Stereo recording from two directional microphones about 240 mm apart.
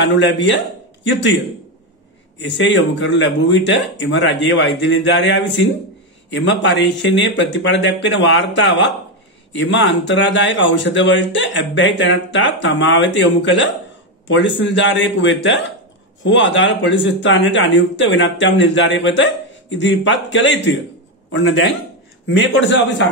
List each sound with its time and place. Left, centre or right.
0.0 s speech: left
2.4 s speech: left